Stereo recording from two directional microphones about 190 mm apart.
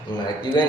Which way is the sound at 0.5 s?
20° left (ahead or behind).